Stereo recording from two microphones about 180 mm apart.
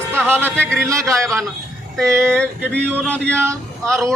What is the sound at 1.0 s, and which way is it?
Speech, 5° left (ahead or behind).